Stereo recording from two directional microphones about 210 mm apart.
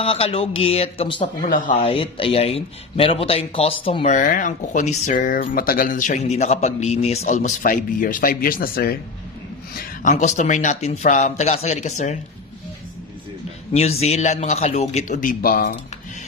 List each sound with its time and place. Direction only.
0.0 s speech: 30° left (ahead or behind)
1.4 s speech: 40° left (ahead or behind)
1.8 s speech: 25° left (ahead or behind)
13.7 s speech: 30° left (ahead or behind)